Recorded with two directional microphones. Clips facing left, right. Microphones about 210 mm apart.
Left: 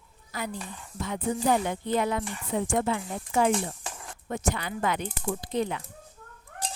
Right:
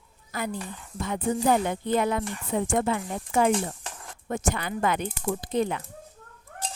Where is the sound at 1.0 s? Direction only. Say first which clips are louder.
Right 2 dB; 50° right (ahead or behind).